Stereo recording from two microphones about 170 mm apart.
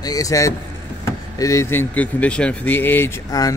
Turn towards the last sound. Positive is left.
turn(degrees=20)  # may be behind; listen again after turning